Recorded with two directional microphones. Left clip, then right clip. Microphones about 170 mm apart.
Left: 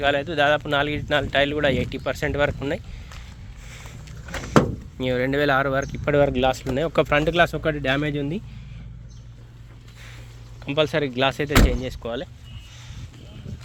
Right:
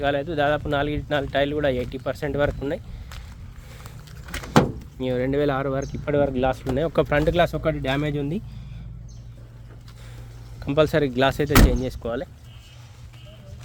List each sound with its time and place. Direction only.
0.0 s speech: 5° right (ahead or behind)
4.9 s speech: centre (ahead or behind)
6.7 s speech: 10° right (ahead or behind)
10.6 s speech: 35° right (ahead or behind)